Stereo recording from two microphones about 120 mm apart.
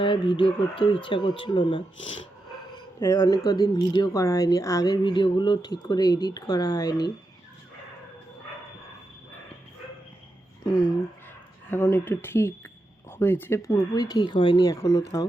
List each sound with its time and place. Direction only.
0.0 s speech: 45° left (ahead or behind)
3.2 s speech: 30° left (ahead or behind)
5.0 s speech: 40° left (ahead or behind)
11.7 s speech: 20° left (ahead or behind)